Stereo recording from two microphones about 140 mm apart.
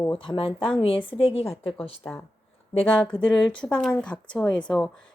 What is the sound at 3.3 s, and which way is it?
Speech, 10° left (ahead or behind).